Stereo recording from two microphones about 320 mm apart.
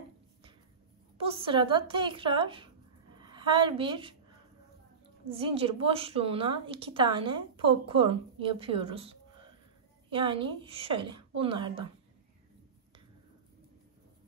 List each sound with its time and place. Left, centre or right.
1.1 s a woman's voice: centre
5.3 s a woman's voice: centre